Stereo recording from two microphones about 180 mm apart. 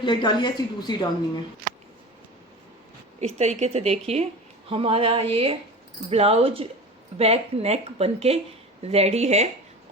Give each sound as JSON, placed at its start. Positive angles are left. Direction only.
{"t": 0.0, "sound": "speech", "side_deg": 25}
{"t": 3.2, "sound": "speech", "side_deg": -40}